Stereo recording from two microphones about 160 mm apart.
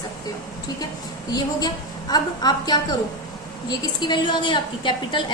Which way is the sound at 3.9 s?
30° left (ahead or behind).